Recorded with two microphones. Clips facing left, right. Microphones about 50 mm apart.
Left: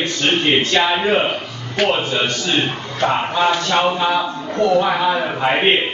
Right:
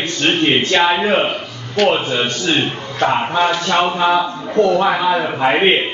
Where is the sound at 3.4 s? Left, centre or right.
Centre.